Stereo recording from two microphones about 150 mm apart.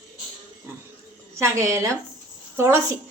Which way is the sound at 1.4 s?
20° right (ahead or behind).